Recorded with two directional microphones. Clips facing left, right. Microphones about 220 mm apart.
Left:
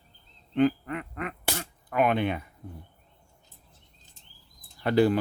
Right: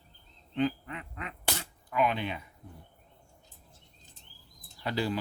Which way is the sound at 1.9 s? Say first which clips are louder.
Left 5 dB; 55° left (ahead or behind).